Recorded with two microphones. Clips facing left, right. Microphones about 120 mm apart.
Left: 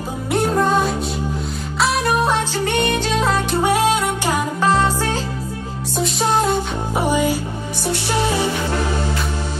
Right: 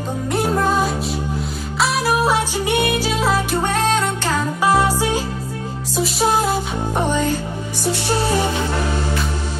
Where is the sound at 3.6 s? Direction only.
10° left (ahead or behind).